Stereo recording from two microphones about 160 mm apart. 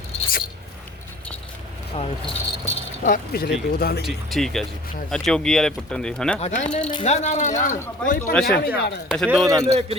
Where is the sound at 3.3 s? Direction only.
85° left.